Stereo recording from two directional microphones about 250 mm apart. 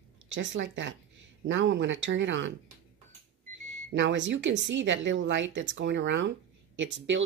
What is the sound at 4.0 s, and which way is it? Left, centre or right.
Speech, right.